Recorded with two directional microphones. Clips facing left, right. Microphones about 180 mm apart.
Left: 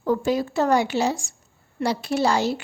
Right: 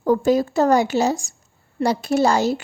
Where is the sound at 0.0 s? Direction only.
45° right (ahead or behind).